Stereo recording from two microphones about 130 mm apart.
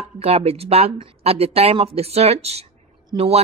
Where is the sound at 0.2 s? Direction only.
50° right (ahead or behind).